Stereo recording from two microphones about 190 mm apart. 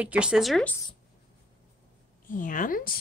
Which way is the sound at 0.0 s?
5° right (ahead or behind).